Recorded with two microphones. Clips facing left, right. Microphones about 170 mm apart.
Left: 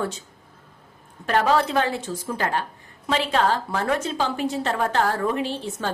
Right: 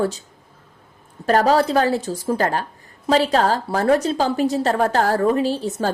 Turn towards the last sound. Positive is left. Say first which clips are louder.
# right 6 dB
turn(degrees=-40)  # may be behind; listen again after turning